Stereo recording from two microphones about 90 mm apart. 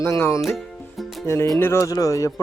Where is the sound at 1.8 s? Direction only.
40° left (ahead or behind).